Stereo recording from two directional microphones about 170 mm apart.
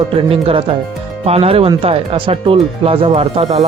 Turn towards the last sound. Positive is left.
turn(degrees=-40)  # may be behind; listen again after turning